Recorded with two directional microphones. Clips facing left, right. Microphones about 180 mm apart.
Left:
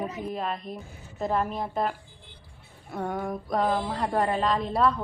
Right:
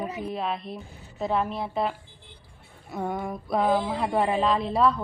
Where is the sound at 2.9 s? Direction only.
10° right (ahead or behind).